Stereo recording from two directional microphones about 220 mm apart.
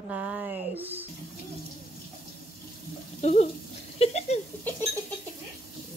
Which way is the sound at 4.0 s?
30° left (ahead or behind).